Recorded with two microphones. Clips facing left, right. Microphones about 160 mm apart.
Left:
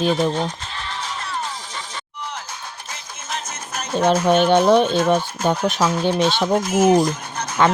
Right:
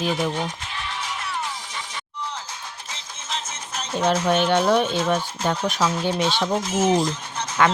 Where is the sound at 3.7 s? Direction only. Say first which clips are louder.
Left 4 dB; 40° left (ahead or behind).